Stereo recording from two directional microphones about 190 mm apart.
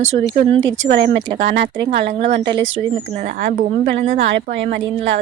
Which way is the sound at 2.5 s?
85° right.